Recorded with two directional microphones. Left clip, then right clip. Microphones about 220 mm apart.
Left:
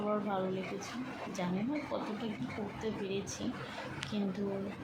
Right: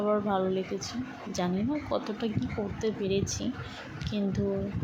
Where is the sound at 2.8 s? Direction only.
25° right (ahead or behind).